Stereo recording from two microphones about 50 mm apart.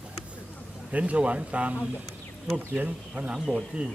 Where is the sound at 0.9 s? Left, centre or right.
Right.